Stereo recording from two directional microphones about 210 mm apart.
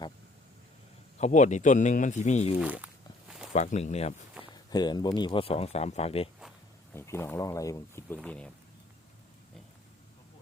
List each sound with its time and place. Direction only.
1.2 s speech: 35° left (ahead or behind)
2.6 s walk: 5° right (ahead or behind)
3.5 s speech: 35° left (ahead or behind)
4.5 s speech: 20° left (ahead or behind)
6.9 s speech: 10° left (ahead or behind)